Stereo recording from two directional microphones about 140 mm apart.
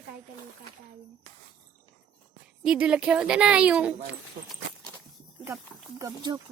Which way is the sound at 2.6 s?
5° right (ahead or behind).